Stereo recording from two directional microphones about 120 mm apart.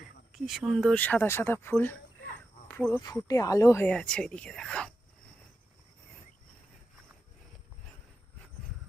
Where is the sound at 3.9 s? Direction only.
10° left (ahead or behind).